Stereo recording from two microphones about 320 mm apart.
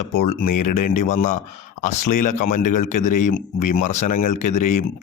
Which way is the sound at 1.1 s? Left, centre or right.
Left.